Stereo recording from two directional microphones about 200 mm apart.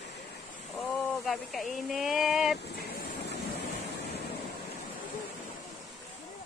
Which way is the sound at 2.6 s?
50° left (ahead or behind).